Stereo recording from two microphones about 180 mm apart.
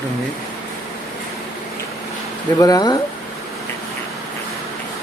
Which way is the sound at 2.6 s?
20° left (ahead or behind).